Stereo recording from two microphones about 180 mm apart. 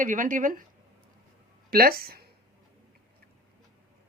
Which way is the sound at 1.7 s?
55° right (ahead or behind).